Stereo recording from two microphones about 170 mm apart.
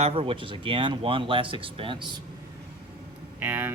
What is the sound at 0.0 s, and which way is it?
Speech, 35° right (ahead or behind).